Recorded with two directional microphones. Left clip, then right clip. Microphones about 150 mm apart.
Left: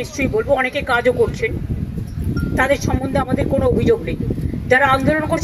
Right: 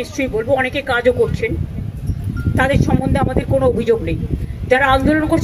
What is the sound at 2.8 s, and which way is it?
Speech, 25° left (ahead or behind).